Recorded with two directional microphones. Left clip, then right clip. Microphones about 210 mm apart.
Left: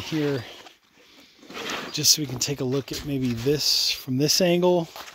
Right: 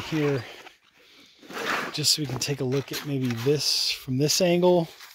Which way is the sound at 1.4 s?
30° left (ahead or behind).